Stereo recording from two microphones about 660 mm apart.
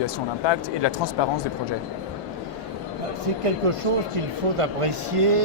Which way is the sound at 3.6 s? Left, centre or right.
Right.